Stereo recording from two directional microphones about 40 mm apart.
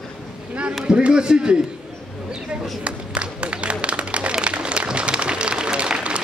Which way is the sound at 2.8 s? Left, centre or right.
Right.